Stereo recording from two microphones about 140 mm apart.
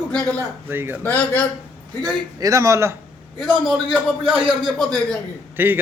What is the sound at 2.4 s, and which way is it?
Speech, 25° right (ahead or behind).